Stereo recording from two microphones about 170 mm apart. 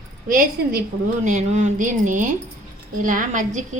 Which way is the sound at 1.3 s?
45° right (ahead or behind).